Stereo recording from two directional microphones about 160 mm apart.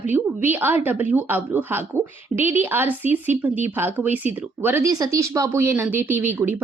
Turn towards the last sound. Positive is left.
turn(degrees=-10)  # may be behind; listen again after turning